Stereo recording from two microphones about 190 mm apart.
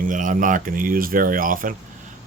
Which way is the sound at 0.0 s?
45° right (ahead or behind).